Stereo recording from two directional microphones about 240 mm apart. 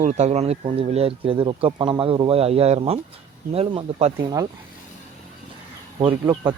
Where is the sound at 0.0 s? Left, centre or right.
Right.